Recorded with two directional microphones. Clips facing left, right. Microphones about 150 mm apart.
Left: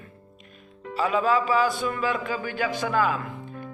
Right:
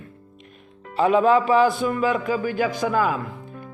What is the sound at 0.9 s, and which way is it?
Speech, 25° right (ahead or behind).